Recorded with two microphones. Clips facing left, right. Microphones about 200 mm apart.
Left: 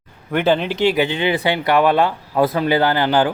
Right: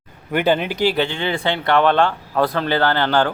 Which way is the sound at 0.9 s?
15° left (ahead or behind).